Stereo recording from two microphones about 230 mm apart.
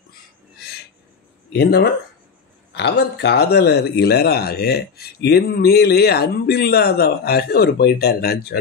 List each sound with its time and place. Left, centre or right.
1.5 s speech: left